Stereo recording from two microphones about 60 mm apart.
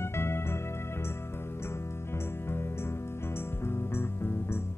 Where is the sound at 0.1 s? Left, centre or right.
Left.